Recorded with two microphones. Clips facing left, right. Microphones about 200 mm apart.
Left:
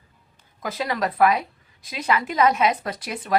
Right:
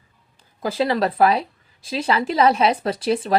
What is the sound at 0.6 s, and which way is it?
A woman's voice, 30° right (ahead or behind).